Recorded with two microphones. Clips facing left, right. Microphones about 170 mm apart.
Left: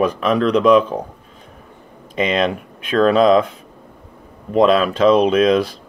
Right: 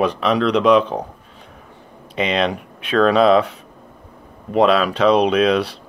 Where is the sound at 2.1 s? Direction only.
45° left (ahead or behind).